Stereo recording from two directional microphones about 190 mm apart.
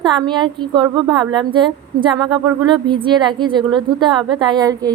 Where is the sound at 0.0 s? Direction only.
25° right (ahead or behind).